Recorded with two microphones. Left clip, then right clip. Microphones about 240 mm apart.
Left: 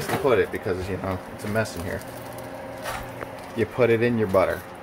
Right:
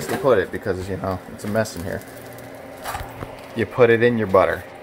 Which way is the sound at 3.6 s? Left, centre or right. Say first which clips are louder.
Right 5 dB; centre.